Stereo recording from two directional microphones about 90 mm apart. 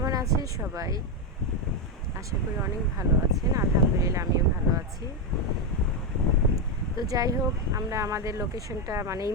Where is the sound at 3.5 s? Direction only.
40° right (ahead or behind).